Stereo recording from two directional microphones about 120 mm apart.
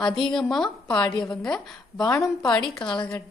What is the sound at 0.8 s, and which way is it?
Speech, 35° left (ahead or behind).